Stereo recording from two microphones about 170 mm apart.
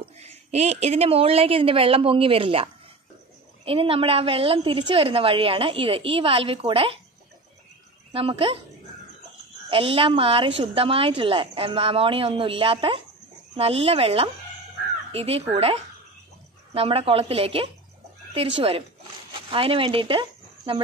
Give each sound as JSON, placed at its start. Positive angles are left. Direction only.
{"t": 0.0, "sound": "a woman's voice", "side_deg": -40}
{"t": 8.1, "sound": "a woman's voice", "side_deg": -35}
{"t": 9.7, "sound": "a woman's voice", "side_deg": -35}